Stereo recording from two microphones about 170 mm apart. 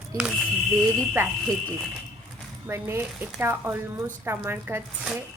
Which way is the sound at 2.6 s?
15° right (ahead or behind).